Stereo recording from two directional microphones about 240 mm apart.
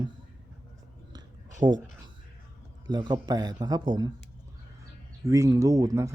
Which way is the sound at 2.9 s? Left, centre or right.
Centre.